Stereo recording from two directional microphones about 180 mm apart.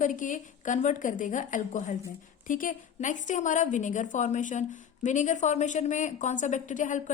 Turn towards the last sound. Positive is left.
turn(degrees=45)  # may be behind; listen again after turning